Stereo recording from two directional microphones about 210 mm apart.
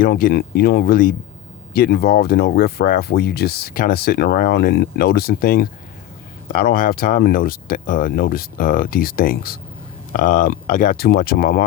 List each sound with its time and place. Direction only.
0.0 s speech: 45° left (ahead or behind)